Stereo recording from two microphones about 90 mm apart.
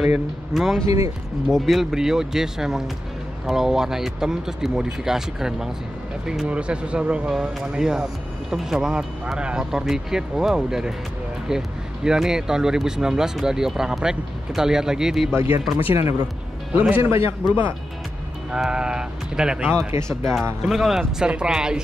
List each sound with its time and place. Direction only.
0.0 s speech: 5° right (ahead or behind)
0.8 s speech: 35° right (ahead or behind)
1.5 s speech: centre (ahead or behind)
15.3 s a man's voice: 25° right (ahead or behind)
18.5 s speech: 10° right (ahead or behind)
19.6 s speech: 5° left (ahead or behind)